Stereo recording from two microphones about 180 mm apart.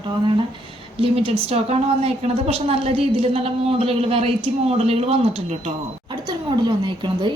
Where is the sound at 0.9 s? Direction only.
30° right (ahead or behind).